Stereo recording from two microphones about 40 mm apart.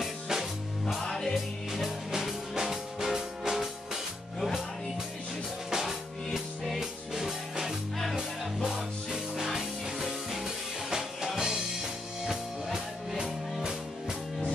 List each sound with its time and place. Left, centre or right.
0.0 s music: centre
1.0 s music: centre
1.3 s music: centre
5.7 s music: centre
8.0 s music: centre
8.6 s music: centre
13.2 s music: centre